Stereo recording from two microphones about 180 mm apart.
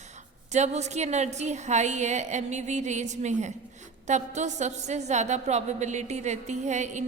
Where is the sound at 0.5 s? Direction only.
40° right (ahead or behind).